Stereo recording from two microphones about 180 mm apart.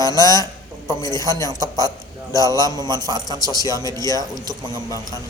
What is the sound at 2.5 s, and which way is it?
Speech, 20° left (ahead or behind).